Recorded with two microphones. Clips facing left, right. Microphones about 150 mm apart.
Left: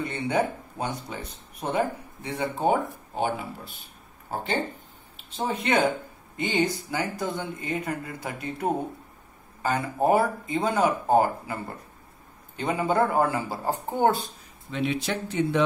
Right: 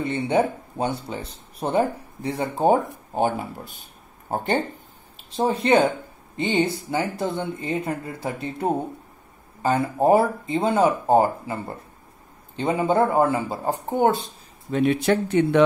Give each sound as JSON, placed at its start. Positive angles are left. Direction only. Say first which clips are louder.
{"t": 0.0, "sound": "speech", "louder": "right 4 dB", "side_deg": -25}
{"t": 5.3, "sound": "speech", "louder": "right 6 dB", "side_deg": -35}
{"t": 14.7, "sound": "speech", "louder": "right 8 dB", "side_deg": -50}